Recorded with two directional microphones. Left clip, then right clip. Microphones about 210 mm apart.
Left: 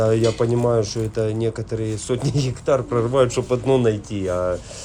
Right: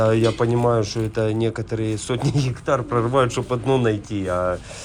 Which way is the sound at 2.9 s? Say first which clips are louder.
Left 1 dB; 5° left (ahead or behind).